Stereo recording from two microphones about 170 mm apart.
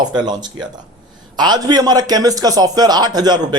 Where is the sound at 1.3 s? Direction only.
25° right (ahead or behind).